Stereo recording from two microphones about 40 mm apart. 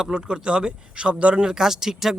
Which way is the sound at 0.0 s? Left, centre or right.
Centre.